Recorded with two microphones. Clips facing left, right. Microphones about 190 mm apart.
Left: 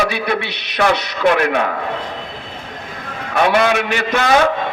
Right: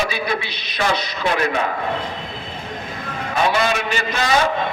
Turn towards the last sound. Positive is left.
turn(degrees=60)  # may be behind; listen again after turning